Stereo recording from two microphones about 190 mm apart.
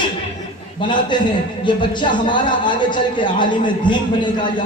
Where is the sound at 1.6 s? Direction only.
25° left (ahead or behind).